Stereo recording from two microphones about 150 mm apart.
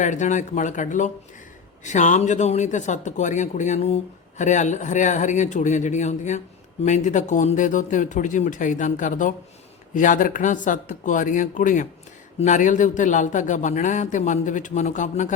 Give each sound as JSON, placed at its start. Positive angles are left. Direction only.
{"t": 0.0, "sound": "a man's voice", "side_deg": 55}